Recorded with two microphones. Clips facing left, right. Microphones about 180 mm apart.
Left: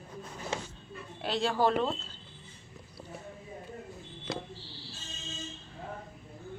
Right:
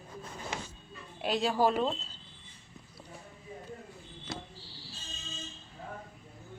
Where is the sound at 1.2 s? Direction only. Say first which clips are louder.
Even; 15° right (ahead or behind).